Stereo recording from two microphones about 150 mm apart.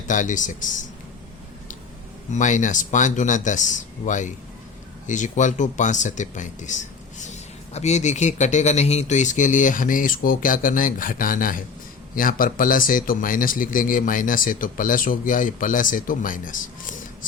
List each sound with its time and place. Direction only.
0.1 s a man's voice: 60° left (ahead or behind)
2.3 s a man's voice: 55° left (ahead or behind)